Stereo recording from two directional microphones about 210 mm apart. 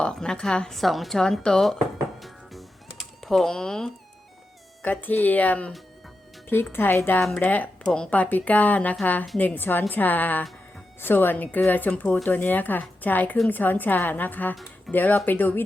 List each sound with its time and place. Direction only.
0.0 s speech: 5° left (ahead or behind)